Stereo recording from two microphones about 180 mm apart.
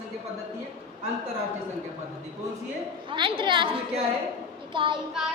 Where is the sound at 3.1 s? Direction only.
30° right (ahead or behind).